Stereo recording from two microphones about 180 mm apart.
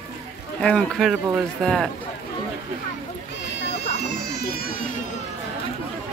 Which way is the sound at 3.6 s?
70° left (ahead or behind).